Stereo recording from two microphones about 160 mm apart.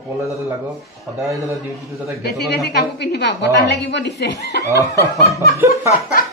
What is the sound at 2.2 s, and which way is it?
A woman's voice, 85° left.